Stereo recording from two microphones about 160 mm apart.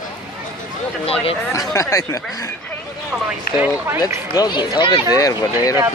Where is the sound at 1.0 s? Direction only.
35° left (ahead or behind).